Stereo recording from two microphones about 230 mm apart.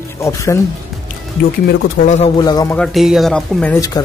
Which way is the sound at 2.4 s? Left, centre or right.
Centre.